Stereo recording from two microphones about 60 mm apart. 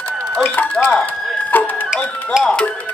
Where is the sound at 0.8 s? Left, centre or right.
Centre.